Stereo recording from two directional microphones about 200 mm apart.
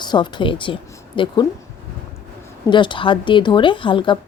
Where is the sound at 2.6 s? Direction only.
25° left (ahead or behind).